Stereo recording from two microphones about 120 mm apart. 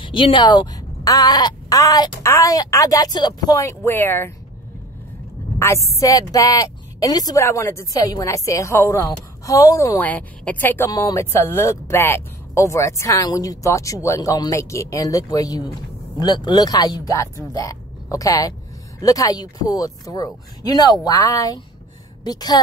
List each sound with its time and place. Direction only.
0.0 s speech: 45° left (ahead or behind); by 4.3 s 20° left (ahead or behind)
5.6 s speech: 25° left (ahead or behind)
9.9 s a woman's voice: 10° left (ahead or behind)
10.9 s a woman's voice: 30° left (ahead or behind)